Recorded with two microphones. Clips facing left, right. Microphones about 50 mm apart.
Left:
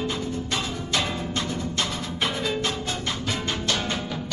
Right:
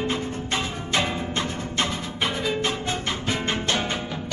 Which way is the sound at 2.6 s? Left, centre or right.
Right.